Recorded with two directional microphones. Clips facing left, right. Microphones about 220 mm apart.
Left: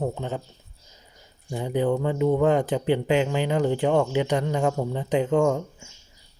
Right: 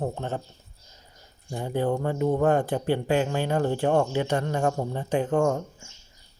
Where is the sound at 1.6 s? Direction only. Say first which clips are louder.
Left 2 dB; 15° left (ahead or behind).